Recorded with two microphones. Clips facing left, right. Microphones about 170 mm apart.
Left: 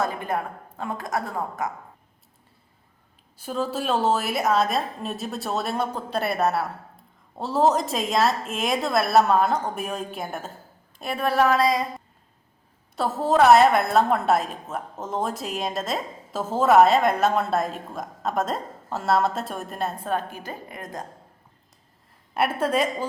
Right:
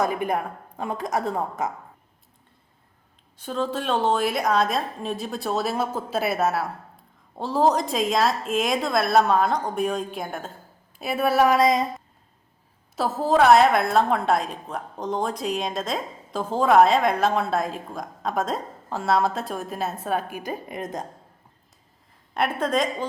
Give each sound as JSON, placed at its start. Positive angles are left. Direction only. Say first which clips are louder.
{"t": 0.0, "sound": "a woman's voice", "louder": "right 2 dB", "side_deg": -15}
{"t": 3.3, "sound": "a woman's voice", "louder": "even", "side_deg": 5}
{"t": 13.0, "sound": "a woman's voice", "louder": "even", "side_deg": 0}
{"t": 22.4, "sound": "a woman's voice", "louder": "left 1 dB", "side_deg": 5}